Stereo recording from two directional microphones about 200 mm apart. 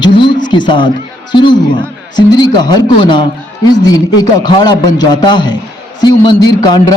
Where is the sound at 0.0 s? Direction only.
25° left (ahead or behind).